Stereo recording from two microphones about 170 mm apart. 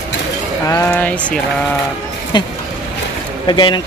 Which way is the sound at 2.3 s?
25° left (ahead or behind).